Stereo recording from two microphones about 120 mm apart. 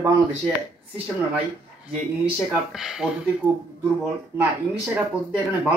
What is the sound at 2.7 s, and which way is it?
Speech, 5° right (ahead or behind).